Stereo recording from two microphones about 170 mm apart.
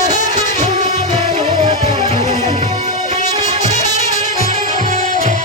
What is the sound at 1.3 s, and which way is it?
Music, 40° right (ahead or behind).